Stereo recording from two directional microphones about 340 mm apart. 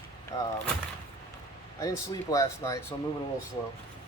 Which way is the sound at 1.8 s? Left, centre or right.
Centre.